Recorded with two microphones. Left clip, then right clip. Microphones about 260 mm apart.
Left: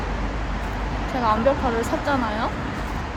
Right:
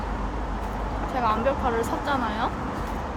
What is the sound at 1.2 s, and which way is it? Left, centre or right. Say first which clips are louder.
Speech: left 4 dB; centre.